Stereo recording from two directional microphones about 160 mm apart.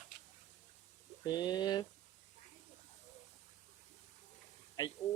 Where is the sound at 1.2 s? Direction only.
25° left (ahead or behind).